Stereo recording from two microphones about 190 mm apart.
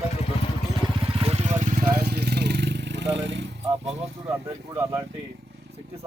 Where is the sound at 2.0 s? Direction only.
55° right (ahead or behind).